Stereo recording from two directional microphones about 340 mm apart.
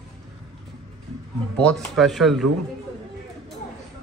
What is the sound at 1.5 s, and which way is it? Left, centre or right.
Speech, centre.